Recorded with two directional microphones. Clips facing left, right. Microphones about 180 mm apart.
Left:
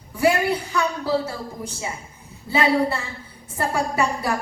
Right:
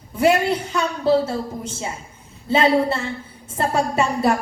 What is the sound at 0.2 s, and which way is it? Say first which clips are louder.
A woman's voice: right 2 dB; 25° right (ahead or behind).